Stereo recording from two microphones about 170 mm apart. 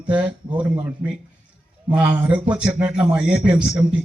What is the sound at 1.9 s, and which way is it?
A man's voice, 10° right (ahead or behind).